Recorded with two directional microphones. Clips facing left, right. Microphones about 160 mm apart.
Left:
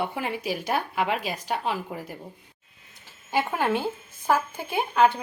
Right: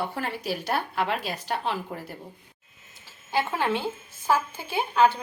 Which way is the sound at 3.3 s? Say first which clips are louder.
Left 1 dB; 15° left (ahead or behind).